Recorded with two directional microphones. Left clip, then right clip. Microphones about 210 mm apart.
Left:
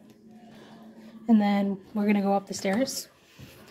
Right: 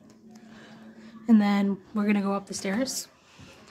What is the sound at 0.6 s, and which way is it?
Speech, 15° right (ahead or behind).